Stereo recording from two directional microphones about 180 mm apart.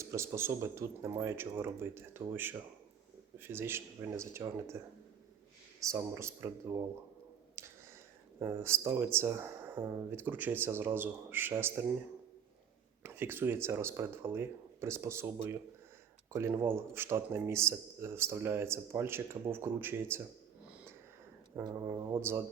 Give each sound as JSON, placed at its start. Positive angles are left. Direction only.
{"t": 0.0, "sound": "a man's voice", "side_deg": -15}
{"t": 5.9, "sound": "a man's voice", "side_deg": -15}
{"t": 7.6, "sound": "a sound", "side_deg": -15}
{"t": 8.4, "sound": "a man's voice", "side_deg": -15}
{"t": 13.0, "sound": "a man's voice", "side_deg": -10}
{"t": 20.7, "sound": "wheeze", "side_deg": -5}
{"t": 21.5, "sound": "a man's voice", "side_deg": -20}